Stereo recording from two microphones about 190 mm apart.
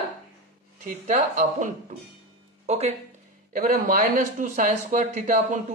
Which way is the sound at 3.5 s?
50° right (ahead or behind).